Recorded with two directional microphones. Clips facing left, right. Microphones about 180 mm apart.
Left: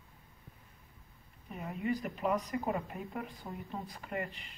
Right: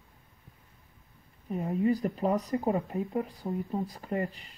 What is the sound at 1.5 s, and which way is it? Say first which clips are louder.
Speech: right 8 dB; 30° right (ahead or behind).